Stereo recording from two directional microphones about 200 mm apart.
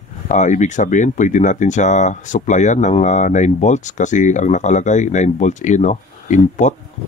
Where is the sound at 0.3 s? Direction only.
35° left (ahead or behind).